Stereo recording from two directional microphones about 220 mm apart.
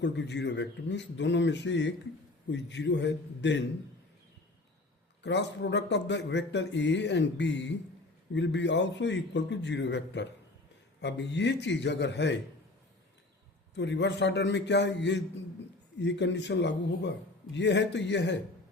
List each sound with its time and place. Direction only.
0.0 s a man's voice: 50° left (ahead or behind)
5.2 s a man's voice: 50° left (ahead or behind)
13.7 s a man's voice: 50° left (ahead or behind)